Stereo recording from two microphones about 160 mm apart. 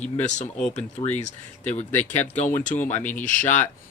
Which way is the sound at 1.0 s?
35° left (ahead or behind).